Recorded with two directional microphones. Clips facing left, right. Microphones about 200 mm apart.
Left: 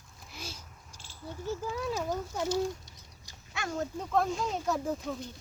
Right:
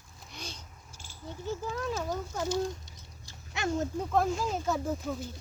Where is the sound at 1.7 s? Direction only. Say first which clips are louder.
Left 1 dB; 10° left (ahead or behind).